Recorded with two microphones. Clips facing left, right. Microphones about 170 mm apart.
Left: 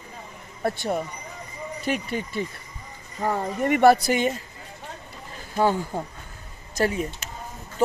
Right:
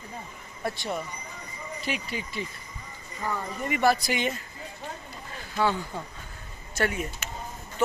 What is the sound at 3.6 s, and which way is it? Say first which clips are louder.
Speech: left 7 dB; 55° left (ahead or behind).